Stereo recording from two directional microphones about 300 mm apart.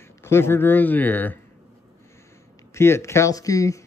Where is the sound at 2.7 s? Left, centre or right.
Centre.